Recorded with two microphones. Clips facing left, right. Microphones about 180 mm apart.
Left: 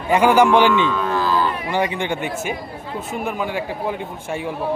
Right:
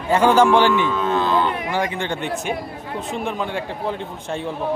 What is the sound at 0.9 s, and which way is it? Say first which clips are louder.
Music: right 1 dB; 20° right (ahead or behind).